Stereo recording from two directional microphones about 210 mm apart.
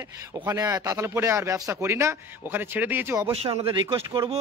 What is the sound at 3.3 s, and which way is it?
Speech, 25° right (ahead or behind).